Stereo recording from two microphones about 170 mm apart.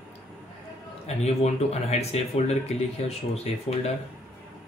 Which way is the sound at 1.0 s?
40° left (ahead or behind).